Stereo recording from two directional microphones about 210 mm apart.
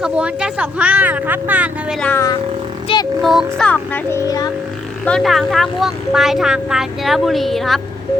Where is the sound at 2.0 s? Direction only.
10° left (ahead or behind).